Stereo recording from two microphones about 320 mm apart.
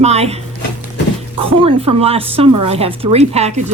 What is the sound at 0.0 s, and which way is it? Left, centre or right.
A woman's voice, centre.